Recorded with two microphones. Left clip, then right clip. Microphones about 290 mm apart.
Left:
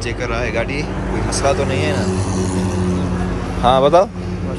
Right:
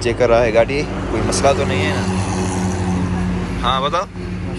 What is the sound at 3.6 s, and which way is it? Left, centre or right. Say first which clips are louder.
Speech: left 7 dB; centre.